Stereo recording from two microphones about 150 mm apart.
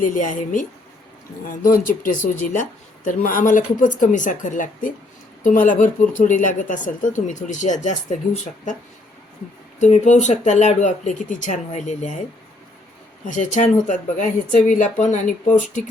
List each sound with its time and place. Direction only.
0.0 s speech: 60° left (ahead or behind)
9.8 s speech: 50° left (ahead or behind)
13.2 s speech: 55° left (ahead or behind)